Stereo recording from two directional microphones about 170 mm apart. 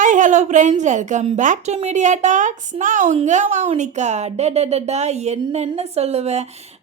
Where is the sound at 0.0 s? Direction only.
50° right (ahead or behind).